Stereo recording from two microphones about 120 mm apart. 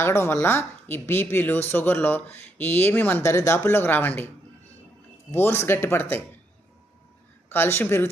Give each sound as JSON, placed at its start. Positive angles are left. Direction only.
{"t": 0.0, "sound": "a woman's voice", "side_deg": 20}
{"t": 5.3, "sound": "a woman's voice", "side_deg": 20}
{"t": 7.5, "sound": "a woman's voice", "side_deg": 20}